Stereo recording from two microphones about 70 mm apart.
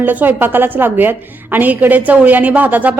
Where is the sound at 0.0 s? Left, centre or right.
Right.